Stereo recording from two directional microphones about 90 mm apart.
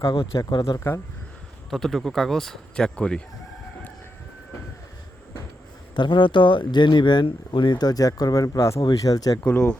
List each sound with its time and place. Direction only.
0.2 s speech: 45° left (ahead or behind)
1.7 s speech: 5° left (ahead or behind)
6.0 s speech: 60° left (ahead or behind); by 8.8 s 35° left (ahead or behind)
8.8 s speech: 45° left (ahead or behind)
9.4 s speech: 25° left (ahead or behind)